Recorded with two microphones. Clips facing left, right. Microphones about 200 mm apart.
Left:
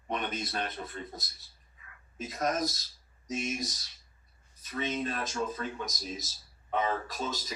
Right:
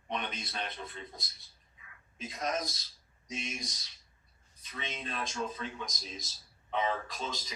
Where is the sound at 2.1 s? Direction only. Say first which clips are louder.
Left 4 dB; 50° left (ahead or behind).